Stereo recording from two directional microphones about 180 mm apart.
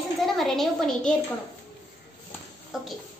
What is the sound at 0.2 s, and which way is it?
Speech, centre (ahead or behind).